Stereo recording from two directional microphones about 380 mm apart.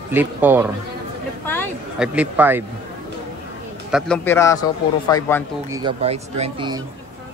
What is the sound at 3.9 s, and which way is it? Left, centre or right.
A man's voice, centre.